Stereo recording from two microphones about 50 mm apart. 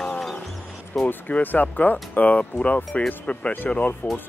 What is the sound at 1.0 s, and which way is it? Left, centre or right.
Speech, left.